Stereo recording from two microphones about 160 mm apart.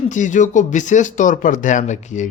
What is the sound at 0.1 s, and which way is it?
Speech, 50° left (ahead or behind).